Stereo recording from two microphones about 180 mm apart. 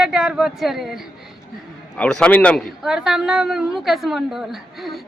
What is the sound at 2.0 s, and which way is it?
Speech, 5° left (ahead or behind).